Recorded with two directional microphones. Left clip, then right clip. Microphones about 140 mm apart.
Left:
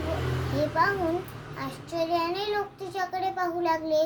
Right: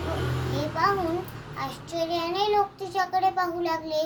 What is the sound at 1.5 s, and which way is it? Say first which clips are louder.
Child singing: right 1 dB; 15° left (ahead or behind).